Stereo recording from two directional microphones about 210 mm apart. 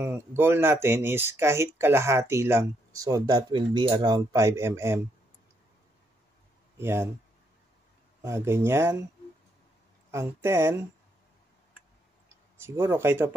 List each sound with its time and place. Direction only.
0.0 s speech: 10° right (ahead or behind)
6.8 s speech: 10° right (ahead or behind)
8.2 s speech: 15° right (ahead or behind)
10.1 s speech: 10° right (ahead or behind)
12.6 s speech: 10° right (ahead or behind)